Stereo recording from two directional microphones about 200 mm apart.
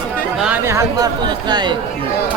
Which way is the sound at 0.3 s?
5° right (ahead or behind).